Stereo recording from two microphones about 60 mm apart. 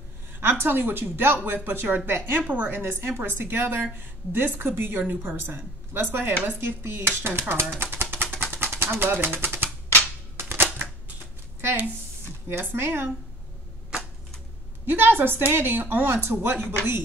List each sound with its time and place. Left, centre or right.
0.4 s a woman's voice: right
7.8 s pigeon: right
10.3 s typewriter: right
12.4 s a woman's voice: right
14.9 s a woman's voice: right